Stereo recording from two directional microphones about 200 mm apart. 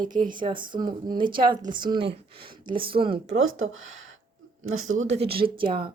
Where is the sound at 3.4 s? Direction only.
90° right.